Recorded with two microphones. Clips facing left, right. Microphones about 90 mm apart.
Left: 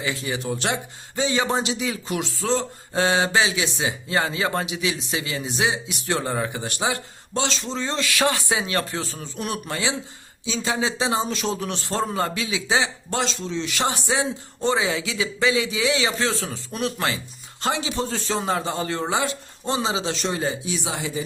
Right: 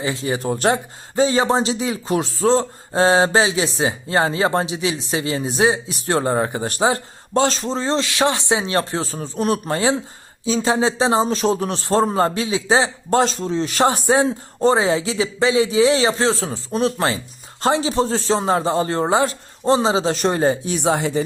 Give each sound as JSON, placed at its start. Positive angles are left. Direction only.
{"t": 0.0, "sound": "speech", "side_deg": -30}
{"t": 0.3, "sound": "speech", "side_deg": -40}